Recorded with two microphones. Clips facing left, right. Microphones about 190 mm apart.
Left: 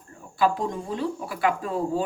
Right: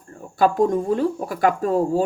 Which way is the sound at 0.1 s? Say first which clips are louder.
Right 4 dB; 45° right (ahead or behind).